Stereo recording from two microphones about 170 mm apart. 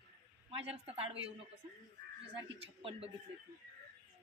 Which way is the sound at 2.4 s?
35° right (ahead or behind).